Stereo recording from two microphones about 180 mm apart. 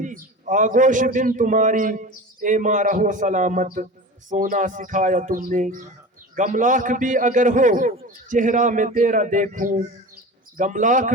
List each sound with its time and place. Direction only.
0.0 s a man's voice: 45° right (ahead or behind)